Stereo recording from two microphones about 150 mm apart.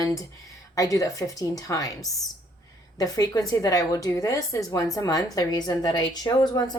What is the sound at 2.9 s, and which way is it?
A woman's voice, 25° left (ahead or behind).